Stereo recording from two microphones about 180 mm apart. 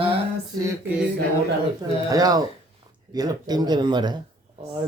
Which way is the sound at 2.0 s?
20° right (ahead or behind).